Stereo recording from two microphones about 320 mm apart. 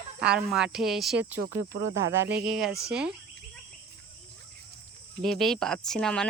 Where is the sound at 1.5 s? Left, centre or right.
Right.